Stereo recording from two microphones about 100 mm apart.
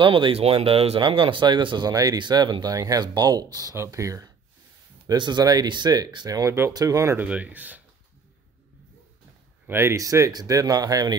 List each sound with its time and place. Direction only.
0.0 s speech: 55° right (ahead or behind); by 4.3 s 35° right (ahead or behind)
5.0 s speech: 45° right (ahead or behind)
7.2 s speech: 15° right (ahead or behind)
9.7 s speech: 25° right (ahead or behind)